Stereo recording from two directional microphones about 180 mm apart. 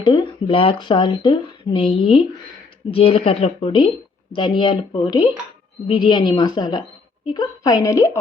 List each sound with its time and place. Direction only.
0.0 s speech: 25° left (ahead or behind)